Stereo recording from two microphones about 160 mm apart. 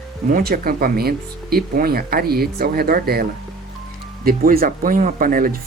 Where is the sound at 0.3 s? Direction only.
65° right (ahead or behind).